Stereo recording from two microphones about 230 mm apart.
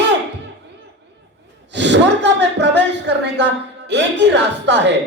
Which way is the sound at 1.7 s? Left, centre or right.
Right.